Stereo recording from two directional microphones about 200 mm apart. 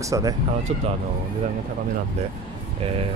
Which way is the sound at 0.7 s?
30° right (ahead or behind).